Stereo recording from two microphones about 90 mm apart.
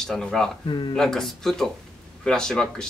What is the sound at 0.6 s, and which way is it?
Speech, 65° left (ahead or behind).